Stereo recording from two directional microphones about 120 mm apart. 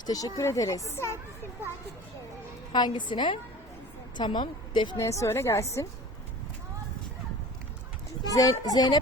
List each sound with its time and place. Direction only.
0.0 s speech: 30° left (ahead or behind)
2.7 s a woman's voice: 40° left (ahead or behind)
4.9 s speech: 25° left (ahead or behind)
8.3 s a woman's voice: 30° left (ahead or behind)